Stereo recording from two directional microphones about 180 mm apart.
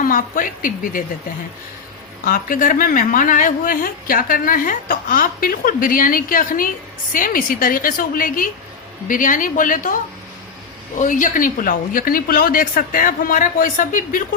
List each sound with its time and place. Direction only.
0.0 s a woman's voice: 50° left (ahead or behind)
2.2 s a woman's voice: 50° left (ahead or behind)